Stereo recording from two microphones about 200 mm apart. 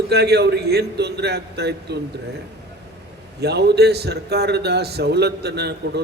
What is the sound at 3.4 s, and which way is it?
A man's voice, 55° right (ahead or behind).